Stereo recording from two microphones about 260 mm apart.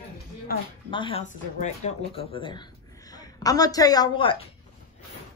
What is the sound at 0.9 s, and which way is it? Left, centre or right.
A woman's voice, centre.